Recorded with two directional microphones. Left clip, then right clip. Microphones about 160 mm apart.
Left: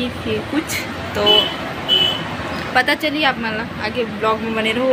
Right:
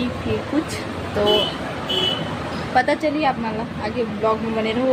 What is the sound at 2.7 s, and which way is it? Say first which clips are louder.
Speech: left 2 dB; 25° right (ahead or behind).